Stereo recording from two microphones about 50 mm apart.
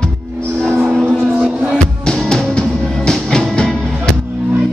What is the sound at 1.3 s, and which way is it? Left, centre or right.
Music, right.